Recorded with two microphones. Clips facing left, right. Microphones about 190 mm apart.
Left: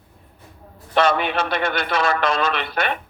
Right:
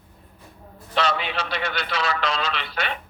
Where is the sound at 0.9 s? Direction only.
50° left (ahead or behind).